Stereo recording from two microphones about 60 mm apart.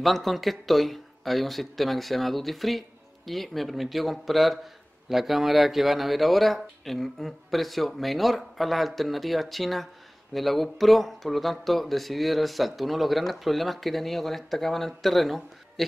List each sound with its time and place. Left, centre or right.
0.0 s speech: centre